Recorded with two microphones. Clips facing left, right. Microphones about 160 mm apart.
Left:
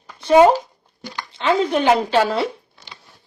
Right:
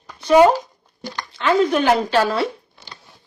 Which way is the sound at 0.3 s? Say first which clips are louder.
Left 1 dB; 30° left (ahead or behind).